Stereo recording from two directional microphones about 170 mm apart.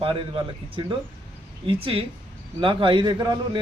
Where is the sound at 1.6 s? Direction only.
35° right (ahead or behind).